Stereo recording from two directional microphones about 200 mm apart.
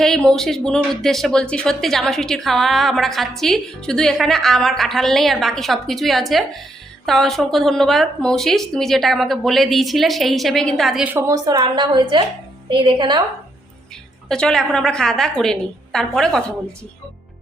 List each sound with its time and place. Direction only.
0.0 s a woman's voice: 5° left (ahead or behind); by 13.2 s 25° right (ahead or behind)
14.3 s speech: 5° left (ahead or behind)